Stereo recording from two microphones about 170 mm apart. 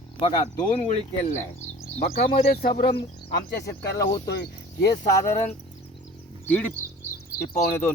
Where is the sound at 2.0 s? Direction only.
65° left (ahead or behind).